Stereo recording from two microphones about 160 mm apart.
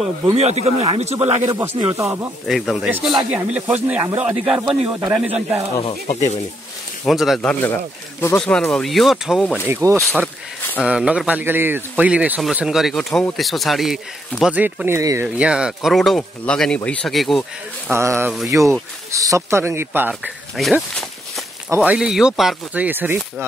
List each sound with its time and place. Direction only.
0.3 s speech: 40° right (ahead or behind)
1.5 s speech: 15° right (ahead or behind)
2.0 s speech: centre (ahead or behind)
5.8 s speech: 35° left (ahead or behind)
7.1 s speech: centre (ahead or behind)
8.2 s speech: 10° left (ahead or behind)
9.7 s speech: 15° right (ahead or behind)
15.2 s speech: 5° right (ahead or behind)
17.9 s speech: 15° right (ahead or behind)
20.5 s speech: centre (ahead or behind)
21.6 s speech: 10° right (ahead or behind)